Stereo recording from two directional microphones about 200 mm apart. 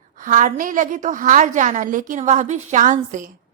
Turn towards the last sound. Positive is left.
turn(degrees=-40)  # may be behind; listen again after turning